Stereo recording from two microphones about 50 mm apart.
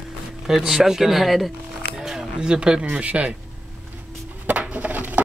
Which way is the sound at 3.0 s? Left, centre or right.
Right.